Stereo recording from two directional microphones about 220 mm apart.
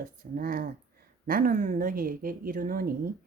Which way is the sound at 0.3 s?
40° right (ahead or behind).